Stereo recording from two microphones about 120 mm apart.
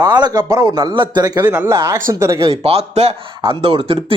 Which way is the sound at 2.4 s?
55° right (ahead or behind).